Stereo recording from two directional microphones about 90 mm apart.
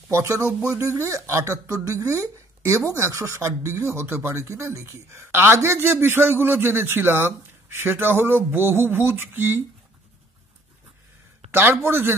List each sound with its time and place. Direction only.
0.1 s speech: 35° right (ahead or behind)
11.5 s speech: 25° right (ahead or behind)